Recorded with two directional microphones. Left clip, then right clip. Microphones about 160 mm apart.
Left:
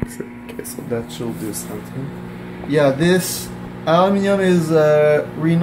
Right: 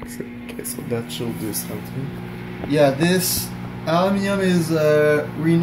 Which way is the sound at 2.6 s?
25° left (ahead or behind).